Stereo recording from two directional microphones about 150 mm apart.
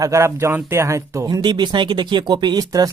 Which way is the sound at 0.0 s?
20° right (ahead or behind).